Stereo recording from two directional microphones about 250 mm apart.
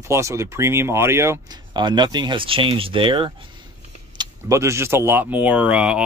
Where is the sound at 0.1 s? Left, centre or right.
Centre.